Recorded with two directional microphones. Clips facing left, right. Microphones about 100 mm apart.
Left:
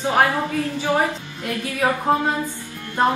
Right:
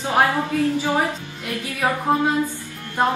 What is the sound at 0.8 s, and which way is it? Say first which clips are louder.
Music: left 1 dB; 15° left (ahead or behind).